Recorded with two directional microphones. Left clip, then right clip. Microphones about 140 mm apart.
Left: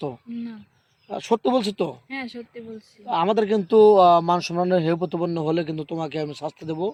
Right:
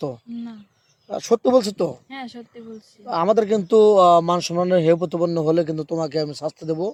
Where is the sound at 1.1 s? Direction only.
50° right (ahead or behind).